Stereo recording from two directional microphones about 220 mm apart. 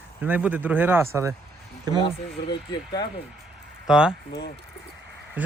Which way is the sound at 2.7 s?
20° left (ahead or behind).